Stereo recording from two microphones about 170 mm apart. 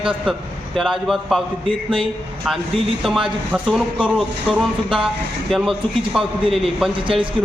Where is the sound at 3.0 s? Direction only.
Centre (ahead or behind).